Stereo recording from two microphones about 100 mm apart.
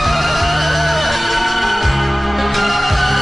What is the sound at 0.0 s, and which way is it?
Music, centre (ahead or behind).